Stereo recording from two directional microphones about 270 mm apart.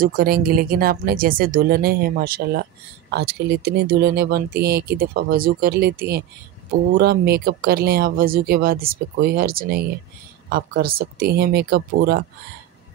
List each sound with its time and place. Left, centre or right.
0.0 s speech: right